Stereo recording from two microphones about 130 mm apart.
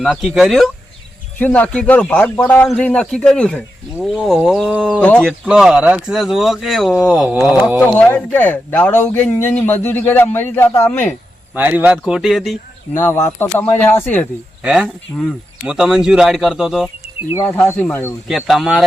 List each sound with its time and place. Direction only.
0.0 s speech: centre (ahead or behind)
1.4 s a man's voice: 10° left (ahead or behind)
5.5 s speech: 5° right (ahead or behind)
7.8 s a man's voice: 15° left (ahead or behind)
11.5 s speech: 15° right (ahead or behind)
12.9 s a man's voice: 20° left (ahead or behind)
14.6 s speech: 5° right (ahead or behind)
17.3 s a man's voice: 20° left (ahead or behind)
18.3 s speech: centre (ahead or behind)